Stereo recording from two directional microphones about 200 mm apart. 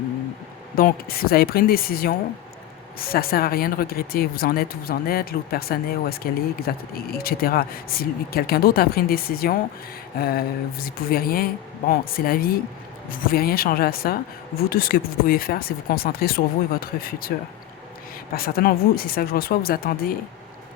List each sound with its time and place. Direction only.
0.8 s speech: 45° left (ahead or behind)
18.3 s speech: 45° left (ahead or behind)